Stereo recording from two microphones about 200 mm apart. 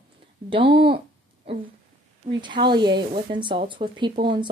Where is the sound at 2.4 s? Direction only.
25° right (ahead or behind).